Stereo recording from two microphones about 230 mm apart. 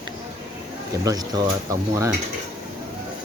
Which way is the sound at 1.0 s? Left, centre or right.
Centre.